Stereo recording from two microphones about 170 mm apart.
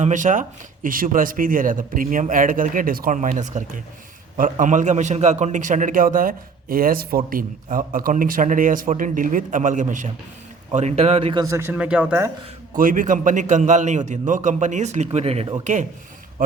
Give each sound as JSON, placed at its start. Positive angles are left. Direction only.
{"t": 0.0, "sound": "speech", "side_deg": -45}
{"t": 4.6, "sound": "speech", "side_deg": -45}
{"t": 11.4, "sound": "speech", "side_deg": -15}
{"t": 12.7, "sound": "speech", "side_deg": -55}
{"t": 15.6, "sound": "speech", "side_deg": -45}